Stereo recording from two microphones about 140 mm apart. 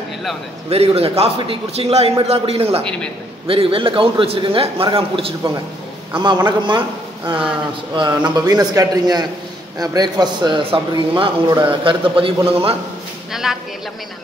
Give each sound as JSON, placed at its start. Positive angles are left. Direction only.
{"t": 0.7, "sound": "a man's voice", "side_deg": -45}
{"t": 2.8, "sound": "a man's voice", "side_deg": 5}
{"t": 3.4, "sound": "a man's voice", "side_deg": -40}
{"t": 6.1, "sound": "a man's voice", "side_deg": -30}
{"t": 8.1, "sound": "a man's voice", "side_deg": -30}
{"t": 13.3, "sound": "a man's voice", "side_deg": -5}